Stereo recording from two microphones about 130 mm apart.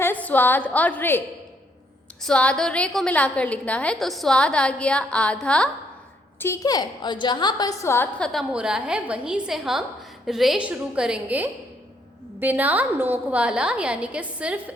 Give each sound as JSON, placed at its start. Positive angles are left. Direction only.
{"t": 0.0, "sound": "a woman's voice", "side_deg": 15}
{"t": 2.2, "sound": "a woman's voice", "side_deg": 10}
{"t": 6.4, "sound": "a woman's voice", "side_deg": 25}
{"t": 8.2, "sound": "a woman's voice", "side_deg": 0}